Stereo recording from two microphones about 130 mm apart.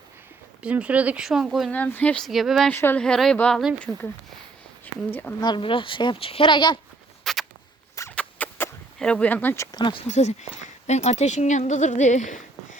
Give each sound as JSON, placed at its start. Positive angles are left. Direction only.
{"t": 0.6, "sound": "speech", "side_deg": -10}
{"t": 1.7, "sound": "speech", "side_deg": 10}
{"t": 2.6, "sound": "speech", "side_deg": 15}
{"t": 3.0, "sound": "speech", "side_deg": 5}
{"t": 4.9, "sound": "a sound", "side_deg": 10}
{"t": 5.4, "sound": "a woman's voice", "side_deg": 35}
{"t": 7.3, "sound": "a sound", "side_deg": 0}
{"t": 8.1, "sound": "rodents", "side_deg": 10}
{"t": 9.0, "sound": "speech", "side_deg": 5}
{"t": 9.7, "sound": "a woman's voice", "side_deg": 40}
{"t": 10.1, "sound": "speech", "side_deg": 65}